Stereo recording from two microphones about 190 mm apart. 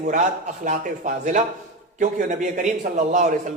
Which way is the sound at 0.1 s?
40° right (ahead or behind).